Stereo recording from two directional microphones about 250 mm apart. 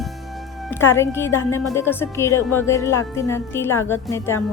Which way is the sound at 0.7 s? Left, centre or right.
Centre.